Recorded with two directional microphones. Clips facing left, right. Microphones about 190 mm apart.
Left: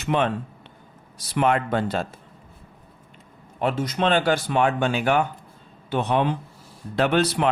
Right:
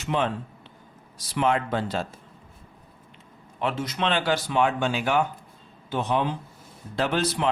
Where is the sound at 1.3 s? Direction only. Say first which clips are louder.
Left 3 dB; 55° left (ahead or behind).